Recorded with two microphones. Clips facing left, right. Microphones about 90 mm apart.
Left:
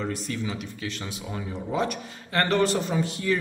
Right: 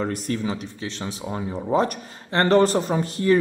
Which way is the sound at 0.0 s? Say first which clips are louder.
Right 5 dB; 45° right (ahead or behind).